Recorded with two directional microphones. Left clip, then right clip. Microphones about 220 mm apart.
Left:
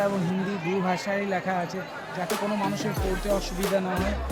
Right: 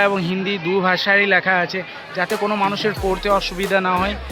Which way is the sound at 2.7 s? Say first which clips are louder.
Right 9 dB; 5° left (ahead or behind).